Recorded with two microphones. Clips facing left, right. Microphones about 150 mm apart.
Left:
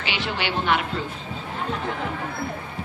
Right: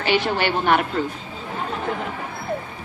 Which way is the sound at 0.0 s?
45° right (ahead or behind).